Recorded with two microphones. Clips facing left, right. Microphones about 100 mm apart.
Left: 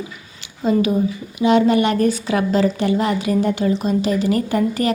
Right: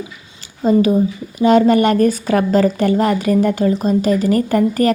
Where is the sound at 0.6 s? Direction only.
40° right (ahead or behind).